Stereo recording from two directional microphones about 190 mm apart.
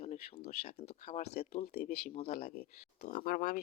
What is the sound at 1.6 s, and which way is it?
Speech, 55° left (ahead or behind).